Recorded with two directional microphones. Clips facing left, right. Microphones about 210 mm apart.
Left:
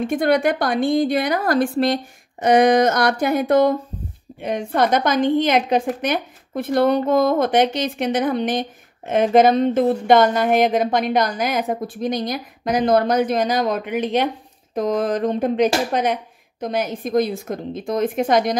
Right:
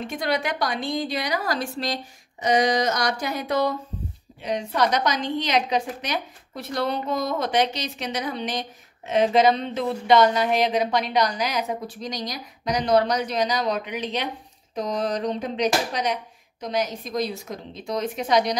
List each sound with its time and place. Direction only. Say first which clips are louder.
0.0 s a woman's voice: left 9 dB; 50° left (ahead or behind)